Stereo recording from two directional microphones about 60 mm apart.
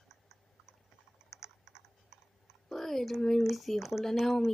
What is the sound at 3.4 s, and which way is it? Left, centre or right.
Speech, centre.